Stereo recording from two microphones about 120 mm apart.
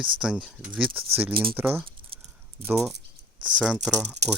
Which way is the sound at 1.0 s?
15° right (ahead or behind).